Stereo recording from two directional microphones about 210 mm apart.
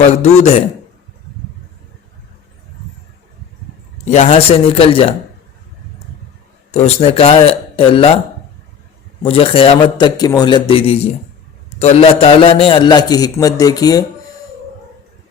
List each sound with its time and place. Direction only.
0.1 s a man's voice: 30° left (ahead or behind)
4.0 s a man's voice: 35° left (ahead or behind)
6.7 s a man's voice: 30° left (ahead or behind)
9.2 s a man's voice: 25° left (ahead or behind)